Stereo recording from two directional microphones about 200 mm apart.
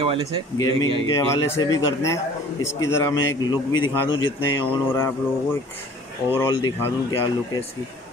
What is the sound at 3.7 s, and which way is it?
Speech, 90° left.